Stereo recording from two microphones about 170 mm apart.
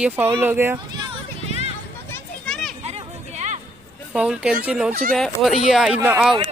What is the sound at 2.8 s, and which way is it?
Hubbub, 40° right (ahead or behind).